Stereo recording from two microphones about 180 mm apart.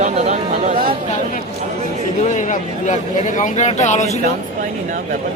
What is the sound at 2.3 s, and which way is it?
Speech, 45° left (ahead or behind).